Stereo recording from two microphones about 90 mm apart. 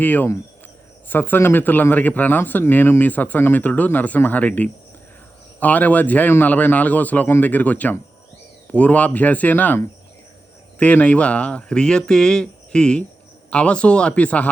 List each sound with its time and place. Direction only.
0.0 s a man's voice: 20° left (ahead or behind)